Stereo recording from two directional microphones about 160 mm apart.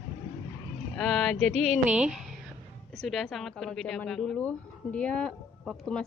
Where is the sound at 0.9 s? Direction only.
5° left (ahead or behind).